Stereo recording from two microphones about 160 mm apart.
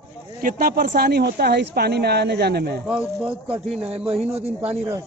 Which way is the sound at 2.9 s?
5° right (ahead or behind).